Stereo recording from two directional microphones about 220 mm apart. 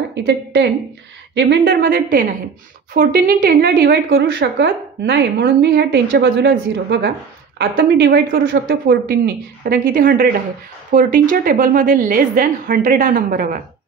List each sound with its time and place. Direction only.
0.1 s a woman's voice: 55° right (ahead or behind)
8.5 s a woman's voice: 55° right (ahead or behind)
8.8 s a woman's voice: 45° right (ahead or behind)